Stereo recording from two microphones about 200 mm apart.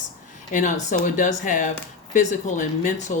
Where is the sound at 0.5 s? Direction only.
40° left (ahead or behind).